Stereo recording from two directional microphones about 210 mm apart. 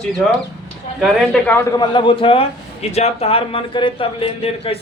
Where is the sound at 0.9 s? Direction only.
Centre (ahead or behind).